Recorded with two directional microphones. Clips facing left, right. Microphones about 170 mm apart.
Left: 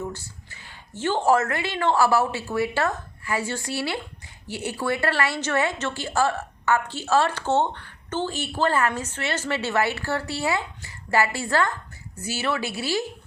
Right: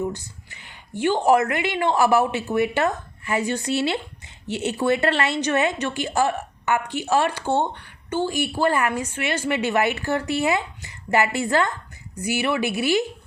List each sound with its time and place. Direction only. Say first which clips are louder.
0.0 s a woman's voice: right 5 dB; 15° right (ahead or behind)